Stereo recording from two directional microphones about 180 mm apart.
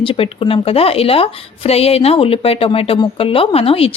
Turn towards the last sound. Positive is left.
turn(degrees=30)  # may be behind; listen again after turning